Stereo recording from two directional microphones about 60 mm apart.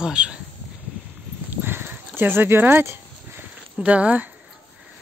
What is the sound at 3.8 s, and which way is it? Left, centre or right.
Speech, right.